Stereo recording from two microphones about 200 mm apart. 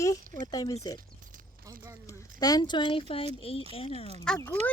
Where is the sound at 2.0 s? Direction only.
20° left (ahead or behind).